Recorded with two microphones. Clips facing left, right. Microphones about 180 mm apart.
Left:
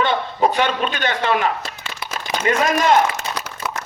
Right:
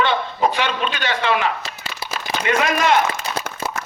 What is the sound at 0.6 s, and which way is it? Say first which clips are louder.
A man's voice: left 3 dB; 45° left (ahead or behind).